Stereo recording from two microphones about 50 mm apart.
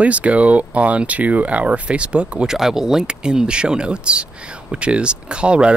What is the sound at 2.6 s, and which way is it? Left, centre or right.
Speech, centre.